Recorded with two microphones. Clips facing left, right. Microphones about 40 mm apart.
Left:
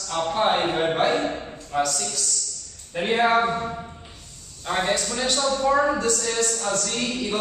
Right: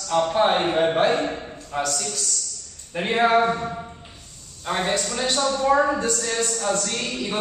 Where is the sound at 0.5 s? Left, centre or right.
Centre.